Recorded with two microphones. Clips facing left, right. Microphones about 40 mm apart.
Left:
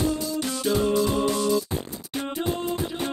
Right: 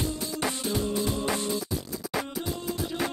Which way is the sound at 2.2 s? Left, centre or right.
Left.